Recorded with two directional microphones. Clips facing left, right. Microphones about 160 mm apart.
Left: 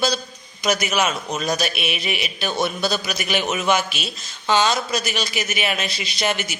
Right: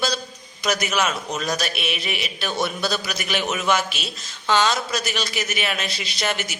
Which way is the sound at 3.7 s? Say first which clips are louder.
Left 1 dB; centre (ahead or behind).